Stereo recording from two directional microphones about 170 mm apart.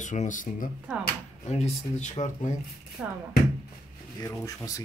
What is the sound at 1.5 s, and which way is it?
Speech, 40° left (ahead or behind).